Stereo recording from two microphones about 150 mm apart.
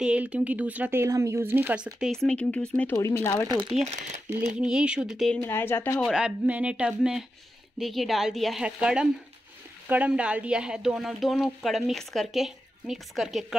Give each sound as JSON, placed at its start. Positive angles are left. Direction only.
{"t": 0.0, "sound": "speech", "side_deg": -10}
{"t": 2.2, "sound": "speech", "side_deg": 5}
{"t": 3.0, "sound": "speech", "side_deg": 20}
{"t": 3.4, "sound": "speech", "side_deg": -35}
{"t": 3.8, "sound": "speech", "side_deg": -50}
{"t": 4.6, "sound": "speech", "side_deg": -5}
{"t": 5.4, "sound": "speech", "side_deg": 15}
{"t": 5.9, "sound": "speech", "side_deg": 5}
{"t": 6.2, "sound": "speech", "side_deg": -10}